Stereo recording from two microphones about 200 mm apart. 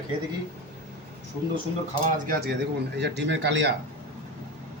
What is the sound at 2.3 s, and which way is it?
Speech, 50° right (ahead or behind).